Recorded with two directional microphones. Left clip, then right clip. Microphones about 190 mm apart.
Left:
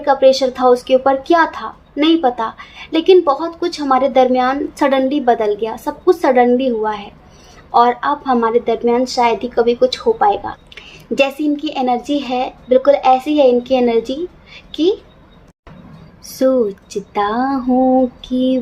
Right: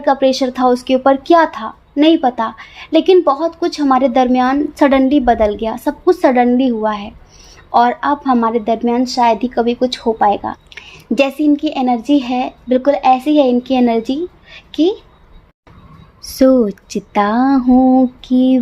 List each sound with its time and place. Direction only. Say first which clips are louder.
0.0 s a woman's voice: left 2 dB; 40° right (ahead or behind)
16.4 s speech: right 3 dB; 45° right (ahead or behind)